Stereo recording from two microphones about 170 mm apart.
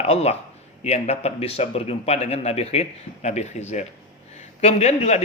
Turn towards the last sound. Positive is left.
turn(degrees=40)  # may be behind; listen again after turning